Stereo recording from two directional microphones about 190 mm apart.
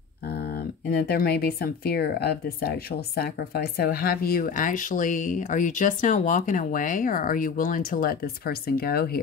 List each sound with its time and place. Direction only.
0.8 s speech: 55° left (ahead or behind)